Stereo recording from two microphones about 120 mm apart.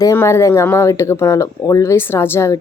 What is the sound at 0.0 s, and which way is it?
Speech, 25° left (ahead or behind).